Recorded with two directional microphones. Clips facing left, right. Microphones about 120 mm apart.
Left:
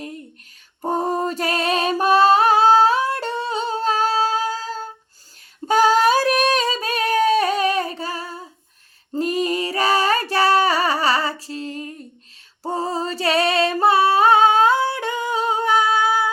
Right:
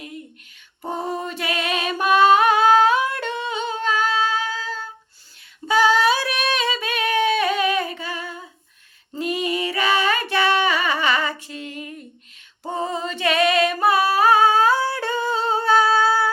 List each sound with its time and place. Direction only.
0.8 s a sound: 40° left (ahead or behind)
5.6 s female singing: 45° left (ahead or behind)
9.1 s music: 40° left (ahead or behind)
12.6 s singing: 35° left (ahead or behind); by 16.3 s 15° left (ahead or behind)